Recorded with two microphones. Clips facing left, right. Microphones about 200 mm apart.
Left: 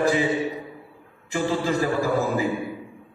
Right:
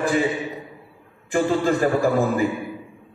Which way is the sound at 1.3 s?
55° right (ahead or behind).